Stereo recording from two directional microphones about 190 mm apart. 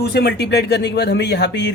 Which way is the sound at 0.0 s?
60° left (ahead or behind).